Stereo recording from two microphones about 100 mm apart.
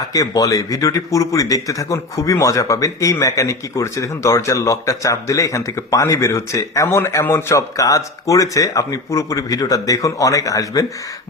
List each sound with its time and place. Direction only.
0.1 s a man's voice: 35° left (ahead or behind)